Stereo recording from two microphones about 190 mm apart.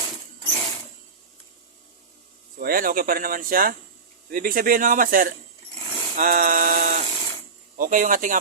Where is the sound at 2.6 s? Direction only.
50° right (ahead or behind).